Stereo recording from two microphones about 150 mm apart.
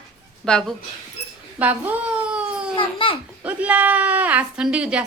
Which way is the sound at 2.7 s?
35° left (ahead or behind).